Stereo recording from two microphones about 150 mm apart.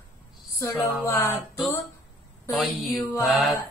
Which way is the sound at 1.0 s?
20° left (ahead or behind).